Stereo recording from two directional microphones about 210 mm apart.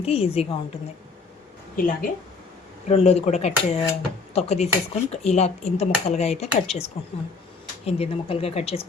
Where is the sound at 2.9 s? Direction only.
30° left (ahead or behind).